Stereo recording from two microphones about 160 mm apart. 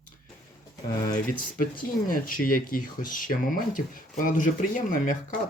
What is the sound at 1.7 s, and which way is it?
Speech, 60° left (ahead or behind).